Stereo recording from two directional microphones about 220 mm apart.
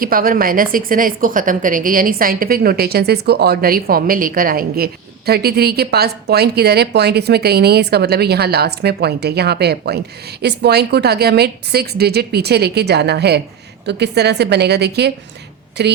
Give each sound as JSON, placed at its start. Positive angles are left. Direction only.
{"t": 0.0, "sound": "a woman's voice", "side_deg": -40}